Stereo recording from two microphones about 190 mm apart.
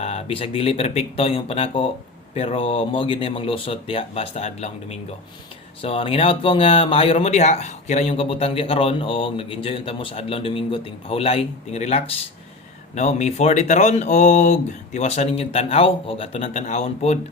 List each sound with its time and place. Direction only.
0.0 s speech: 30° left (ahead or behind)